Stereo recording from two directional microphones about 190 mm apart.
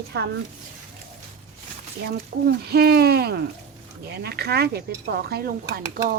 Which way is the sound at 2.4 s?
55° right (ahead or behind).